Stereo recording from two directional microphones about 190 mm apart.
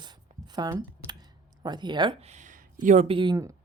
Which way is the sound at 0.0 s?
20° right (ahead or behind).